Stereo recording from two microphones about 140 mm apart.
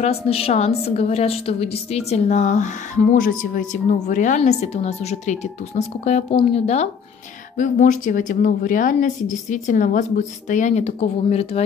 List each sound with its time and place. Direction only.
0.0 s a woman's voice: 45° left (ahead or behind); by 3.6 s 85° left
4.1 s a woman's voice: 65° left (ahead or behind)
4.4 s a woman's voice: 50° left (ahead or behind)
7.5 s a woman's voice: 65° left (ahead or behind); by 11.6 s 50° left (ahead or behind)